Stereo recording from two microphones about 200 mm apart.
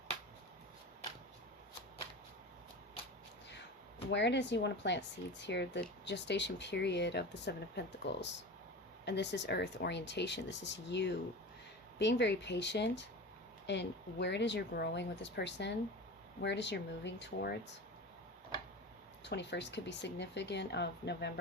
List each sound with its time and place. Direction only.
4.1 s speech: 60° left (ahead or behind)
19.2 s speech: 60° left (ahead or behind)